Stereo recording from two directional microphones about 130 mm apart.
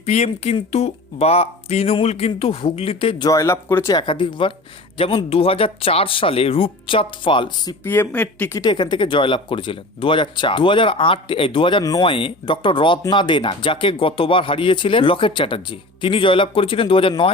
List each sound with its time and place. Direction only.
0.0 s speech: 55° left (ahead or behind)
3.2 s speech: 25° left (ahead or behind)
3.9 s speech: 40° left (ahead or behind)
7.9 s speech: 15° left (ahead or behind)
8.5 s speech: 35° left (ahead or behind)
11.8 s speech: 30° left (ahead or behind)
12.0 s speech: 40° left (ahead or behind)